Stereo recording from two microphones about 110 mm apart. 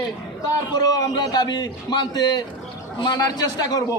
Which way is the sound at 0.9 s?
35° left (ahead or behind).